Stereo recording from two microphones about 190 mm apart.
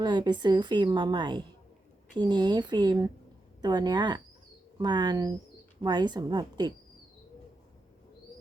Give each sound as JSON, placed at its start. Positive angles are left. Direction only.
{"t": 0.0, "sound": "a woman's voice", "side_deg": -25}